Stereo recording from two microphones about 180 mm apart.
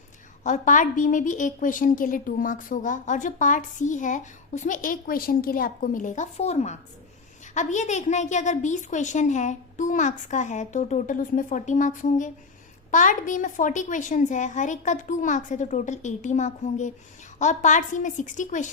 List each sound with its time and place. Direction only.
0.4 s a woman's voice: 45° left (ahead or behind)